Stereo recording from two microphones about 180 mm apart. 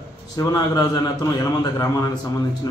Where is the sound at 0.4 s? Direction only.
20° left (ahead or behind).